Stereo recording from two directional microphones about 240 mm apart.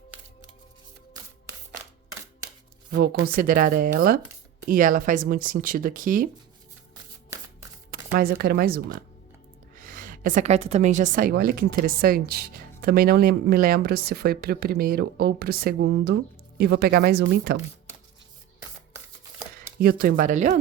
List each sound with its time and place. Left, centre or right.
2.9 s speech: right
7.9 s a woman's voice: right
19.8 s speech: right